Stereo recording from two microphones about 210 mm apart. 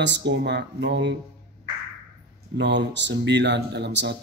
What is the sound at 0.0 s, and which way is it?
Speech, 55° right (ahead or behind).